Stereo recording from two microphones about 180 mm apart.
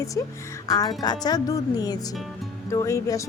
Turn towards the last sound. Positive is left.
turn(degrees=15)  # may be behind; listen again after turning